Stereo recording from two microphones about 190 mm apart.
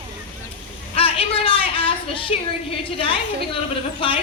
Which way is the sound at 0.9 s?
30° left (ahead or behind).